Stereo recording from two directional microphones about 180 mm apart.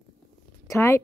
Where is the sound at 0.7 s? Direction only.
15° left (ahead or behind).